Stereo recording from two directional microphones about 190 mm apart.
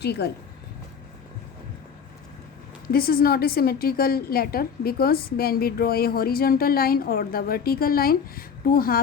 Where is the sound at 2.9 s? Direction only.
50° left (ahead or behind).